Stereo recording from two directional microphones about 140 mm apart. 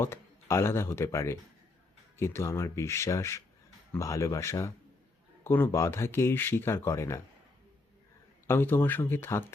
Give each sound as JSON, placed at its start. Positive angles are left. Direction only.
{"t": 0.0, "sound": "speech", "side_deg": 20}
{"t": 8.4, "sound": "speech", "side_deg": 15}